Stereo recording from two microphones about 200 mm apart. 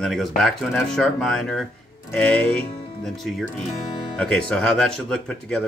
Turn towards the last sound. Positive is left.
turn(degrees=5)  # may be behind; listen again after turning